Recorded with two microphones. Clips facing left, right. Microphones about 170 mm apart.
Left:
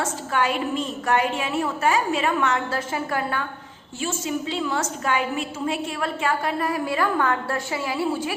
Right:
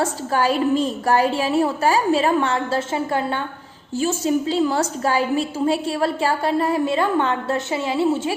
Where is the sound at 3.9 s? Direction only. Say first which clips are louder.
Right 7 dB; 35° right (ahead or behind).